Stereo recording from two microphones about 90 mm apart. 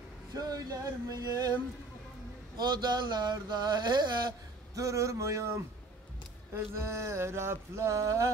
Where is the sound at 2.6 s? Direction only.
50° right (ahead or behind).